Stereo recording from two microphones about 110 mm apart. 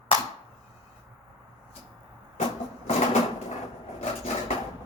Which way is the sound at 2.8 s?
90° left.